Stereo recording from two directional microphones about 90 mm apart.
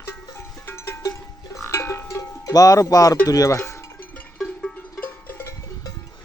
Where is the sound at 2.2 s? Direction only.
40° left (ahead or behind).